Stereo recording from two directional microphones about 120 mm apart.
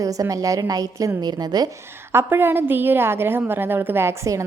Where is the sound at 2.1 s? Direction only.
20° right (ahead or behind).